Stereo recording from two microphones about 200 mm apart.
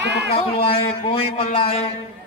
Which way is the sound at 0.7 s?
30° left (ahead or behind).